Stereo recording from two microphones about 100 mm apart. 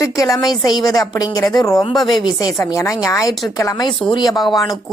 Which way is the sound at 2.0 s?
45° left (ahead or behind).